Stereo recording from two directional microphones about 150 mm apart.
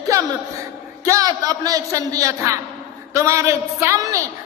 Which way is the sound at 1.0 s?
20° right (ahead or behind).